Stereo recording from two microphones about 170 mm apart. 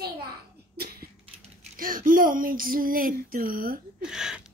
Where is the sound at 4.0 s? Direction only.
5° right (ahead or behind).